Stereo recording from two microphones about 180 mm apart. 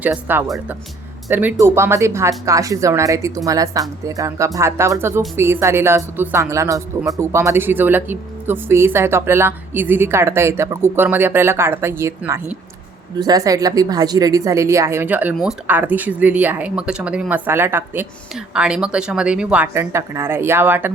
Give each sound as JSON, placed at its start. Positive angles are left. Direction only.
{"t": 0.0, "sound": "a woman's voice", "side_deg": -10}